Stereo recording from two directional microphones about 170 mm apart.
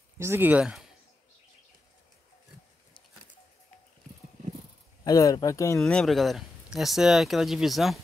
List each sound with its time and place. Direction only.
0.2 s speech: 15° right (ahead or behind)
5.0 s speech: 20° left (ahead or behind)
5.8 s speech: 5° left (ahead or behind)